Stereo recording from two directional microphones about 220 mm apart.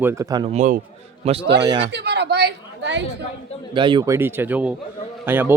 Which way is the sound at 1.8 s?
50° right (ahead or behind).